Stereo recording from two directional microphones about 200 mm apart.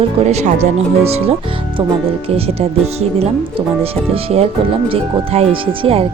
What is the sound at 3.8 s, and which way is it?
Speech, 30° right (ahead or behind).